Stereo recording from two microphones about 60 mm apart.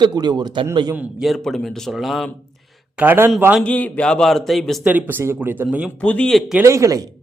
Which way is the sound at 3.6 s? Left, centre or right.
Left.